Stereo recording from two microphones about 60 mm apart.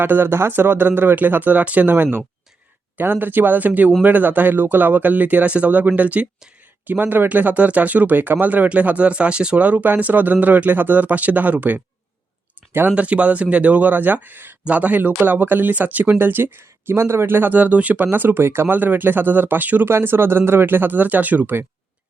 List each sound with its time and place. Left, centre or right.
0.0 s speech: right
12.9 s speech: right
18.8 s speech: right
19.9 s speech: right